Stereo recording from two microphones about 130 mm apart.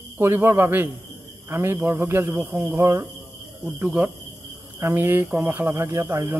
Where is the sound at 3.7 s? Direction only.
10° right (ahead or behind).